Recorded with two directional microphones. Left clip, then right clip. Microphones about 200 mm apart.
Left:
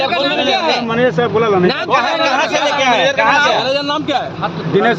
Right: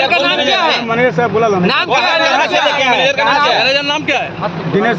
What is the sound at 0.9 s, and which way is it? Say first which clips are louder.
Speech: right 1 dB; 25° left (ahead or behind).